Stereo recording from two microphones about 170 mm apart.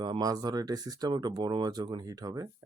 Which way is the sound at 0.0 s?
25° right (ahead or behind).